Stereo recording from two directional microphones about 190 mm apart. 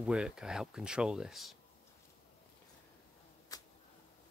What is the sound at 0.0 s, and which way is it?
Speech, 5° right (ahead or behind).